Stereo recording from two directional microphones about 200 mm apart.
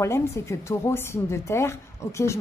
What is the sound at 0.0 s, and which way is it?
A woman's voice, 15° left (ahead or behind).